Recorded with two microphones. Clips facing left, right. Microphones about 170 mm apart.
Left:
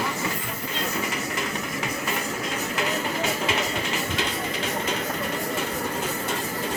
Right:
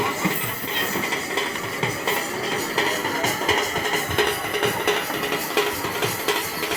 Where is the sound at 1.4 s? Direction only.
30° right (ahead or behind); by 6.7 s 90° right.